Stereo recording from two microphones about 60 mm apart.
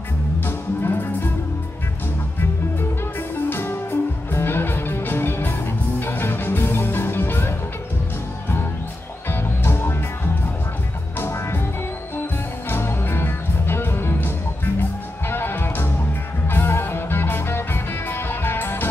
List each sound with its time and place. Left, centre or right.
0.5 s music: left
3.4 s music: left
9.3 s music: left
12.6 s music: left